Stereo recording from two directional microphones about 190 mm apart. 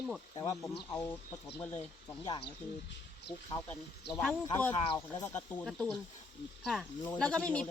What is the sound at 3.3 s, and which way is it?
Speech, 60° left (ahead or behind).